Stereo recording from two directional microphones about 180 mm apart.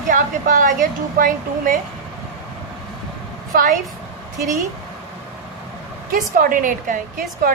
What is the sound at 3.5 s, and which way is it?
Speech, 55° right (ahead or behind).